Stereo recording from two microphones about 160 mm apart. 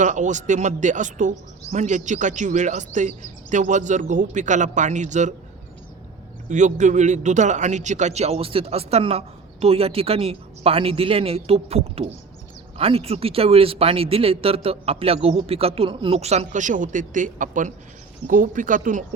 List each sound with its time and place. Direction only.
0.0 s speech: 50° right (ahead or behind)
6.5 s speech: 50° right (ahead or behind)